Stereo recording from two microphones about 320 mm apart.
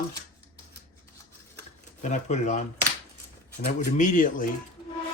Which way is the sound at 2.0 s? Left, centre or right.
Left.